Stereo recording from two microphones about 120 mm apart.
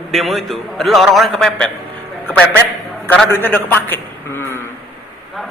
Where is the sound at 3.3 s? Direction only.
15° left (ahead or behind).